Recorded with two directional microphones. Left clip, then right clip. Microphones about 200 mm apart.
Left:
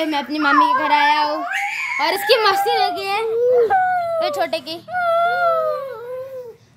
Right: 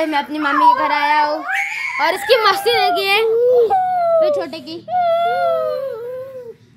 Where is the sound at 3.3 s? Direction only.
10° left (ahead or behind).